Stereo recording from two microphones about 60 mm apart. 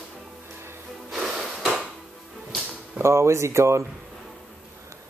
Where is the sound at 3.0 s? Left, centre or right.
Right.